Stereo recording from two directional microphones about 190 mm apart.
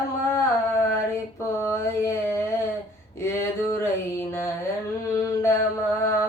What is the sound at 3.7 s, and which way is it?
Mantra, 15° left (ahead or behind).